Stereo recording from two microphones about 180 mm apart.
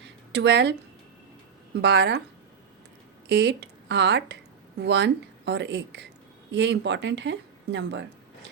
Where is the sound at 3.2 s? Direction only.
70° right (ahead or behind); by 8.0 s 85° right.